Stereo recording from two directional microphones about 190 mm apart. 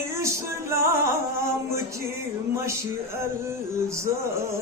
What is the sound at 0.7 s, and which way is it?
Music, 15° right (ahead or behind).